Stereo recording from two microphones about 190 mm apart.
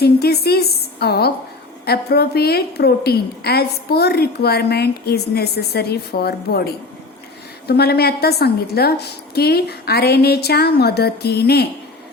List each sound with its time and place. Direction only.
0.0 s a woman's voice: 55° left (ahead or behind)